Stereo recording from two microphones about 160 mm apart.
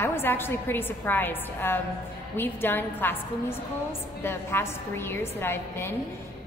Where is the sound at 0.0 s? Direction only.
15° left (ahead or behind).